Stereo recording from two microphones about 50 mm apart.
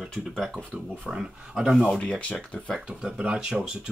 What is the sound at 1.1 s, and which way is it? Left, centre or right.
Speech, centre.